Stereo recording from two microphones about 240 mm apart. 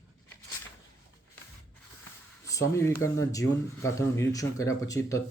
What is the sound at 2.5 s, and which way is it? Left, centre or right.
Speech, centre.